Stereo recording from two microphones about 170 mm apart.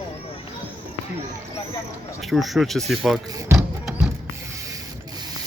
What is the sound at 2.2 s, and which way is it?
Speech, centre (ahead or behind).